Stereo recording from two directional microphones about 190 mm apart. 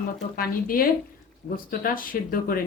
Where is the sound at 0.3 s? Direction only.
50° left (ahead or behind).